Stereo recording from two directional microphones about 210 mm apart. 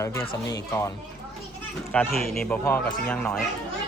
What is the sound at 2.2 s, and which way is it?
Speech, 5° left (ahead or behind).